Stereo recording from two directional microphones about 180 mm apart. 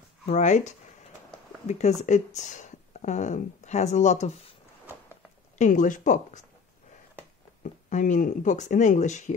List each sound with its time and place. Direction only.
0.3 s speech: 40° left (ahead or behind)
5.6 s speech: 45° left (ahead or behind)
7.6 s speech: 45° left (ahead or behind)